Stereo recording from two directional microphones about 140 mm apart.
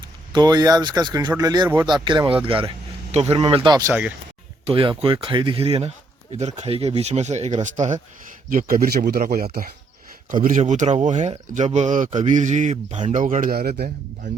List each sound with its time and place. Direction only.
0.3 s speech: 30° right (ahead or behind); by 3.4 s 45° right (ahead or behind)
3.4 s speech: 35° right (ahead or behind)
4.6 s speech: 40° right (ahead or behind); by 7.9 s 55° right (ahead or behind)
8.4 s speech: 85° right
10.3 s speech: 75° right (ahead or behind); by 13.2 s 55° right (ahead or behind)
13.2 s speech: 80° right